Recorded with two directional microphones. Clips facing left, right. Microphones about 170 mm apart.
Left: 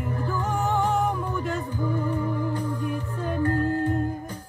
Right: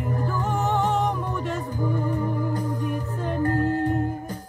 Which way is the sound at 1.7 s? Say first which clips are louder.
Right 3 dB; 45° right (ahead or behind).